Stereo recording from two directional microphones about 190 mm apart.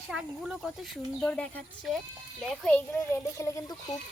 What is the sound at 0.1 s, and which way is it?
A woman's voice, 5° right (ahead or behind).